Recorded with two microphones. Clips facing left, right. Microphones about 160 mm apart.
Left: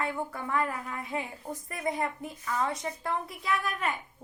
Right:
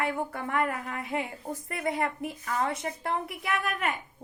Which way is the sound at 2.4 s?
60° right (ahead or behind).